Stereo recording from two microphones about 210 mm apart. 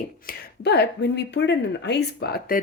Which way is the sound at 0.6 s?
50° left (ahead or behind).